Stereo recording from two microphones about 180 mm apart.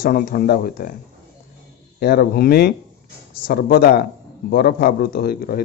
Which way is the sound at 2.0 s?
60° left (ahead or behind).